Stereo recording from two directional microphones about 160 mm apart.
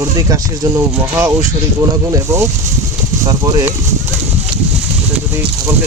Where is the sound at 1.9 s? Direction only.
20° right (ahead or behind).